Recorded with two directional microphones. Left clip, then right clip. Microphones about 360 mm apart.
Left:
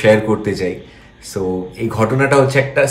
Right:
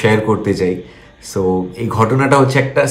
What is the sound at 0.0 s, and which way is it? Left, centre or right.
A man's voice, centre.